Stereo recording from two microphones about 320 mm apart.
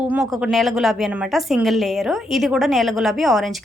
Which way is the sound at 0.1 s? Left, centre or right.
Centre.